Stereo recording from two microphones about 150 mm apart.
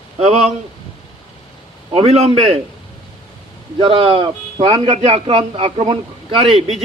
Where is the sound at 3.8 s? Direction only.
35° right (ahead or behind).